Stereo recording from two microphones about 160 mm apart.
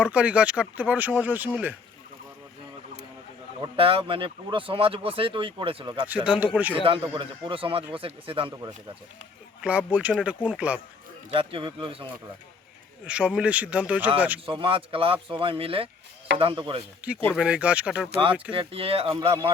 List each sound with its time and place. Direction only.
0.0 s speech: 10° right (ahead or behind)
3.6 s speech: 35° right (ahead or behind)
6.2 s speech: 10° right (ahead or behind)
6.8 s speech: 35° right (ahead or behind)
9.6 s speech: 5° right (ahead or behind)
11.3 s speech: 35° right (ahead or behind)
13.1 s speech: 5° right (ahead or behind)
14.4 s speech: 35° right (ahead or behind)
17.3 s speech: 5° right (ahead or behind)
18.5 s speech: 35° right (ahead or behind)